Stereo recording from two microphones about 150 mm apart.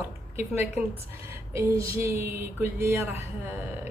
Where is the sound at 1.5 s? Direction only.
20° right (ahead or behind).